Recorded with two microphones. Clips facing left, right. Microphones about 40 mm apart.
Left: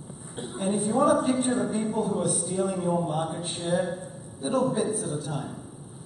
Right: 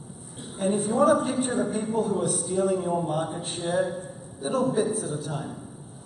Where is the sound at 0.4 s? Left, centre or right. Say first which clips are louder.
Even; centre.